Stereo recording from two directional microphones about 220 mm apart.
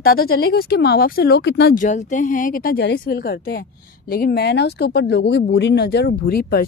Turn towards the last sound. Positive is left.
turn(degrees=40)  # may be behind; listen again after turning